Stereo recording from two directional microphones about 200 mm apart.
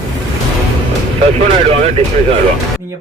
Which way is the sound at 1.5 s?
30° right (ahead or behind).